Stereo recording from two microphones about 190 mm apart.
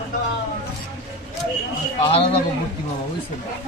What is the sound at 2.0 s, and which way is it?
Speech, 30° left (ahead or behind).